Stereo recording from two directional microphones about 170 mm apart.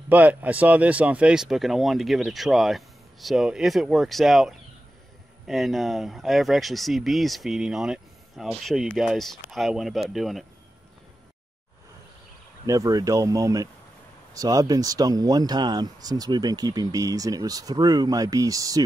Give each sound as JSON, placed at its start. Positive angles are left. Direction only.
{"t": 0.1, "sound": "speech", "side_deg": -10}
{"t": 12.6, "sound": "speech", "side_deg": -20}